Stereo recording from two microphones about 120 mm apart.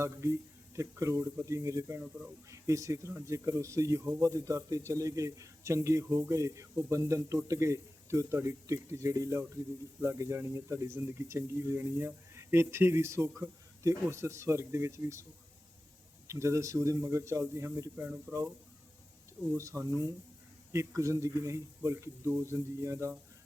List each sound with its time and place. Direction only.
0.0 s speech: 25° right (ahead or behind)
16.2 s speech: 25° right (ahead or behind)
19.6 s speech: 25° right (ahead or behind)